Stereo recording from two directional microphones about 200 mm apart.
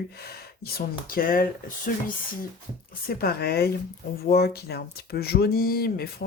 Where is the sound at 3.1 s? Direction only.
50° left (ahead or behind).